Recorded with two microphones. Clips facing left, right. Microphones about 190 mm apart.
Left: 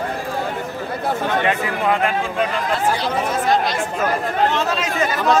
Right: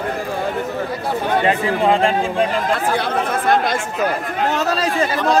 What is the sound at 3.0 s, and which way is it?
Speech, 55° right (ahead or behind).